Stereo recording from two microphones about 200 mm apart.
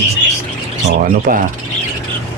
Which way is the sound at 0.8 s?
45° right (ahead or behind).